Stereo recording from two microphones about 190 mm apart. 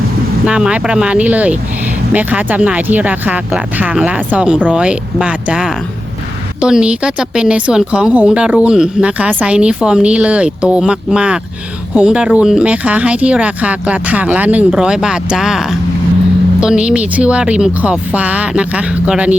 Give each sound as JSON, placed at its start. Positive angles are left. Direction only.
{"t": 0.4, "sound": "a woman's voice", "side_deg": -5}